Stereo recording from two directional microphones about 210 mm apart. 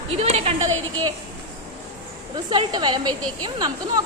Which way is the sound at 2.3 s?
20° right (ahead or behind).